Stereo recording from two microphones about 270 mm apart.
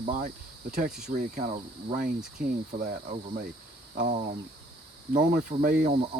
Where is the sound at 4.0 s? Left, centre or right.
Right.